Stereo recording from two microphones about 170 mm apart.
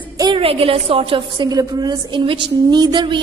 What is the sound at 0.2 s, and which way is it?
A woman's voice, 30° right (ahead or behind).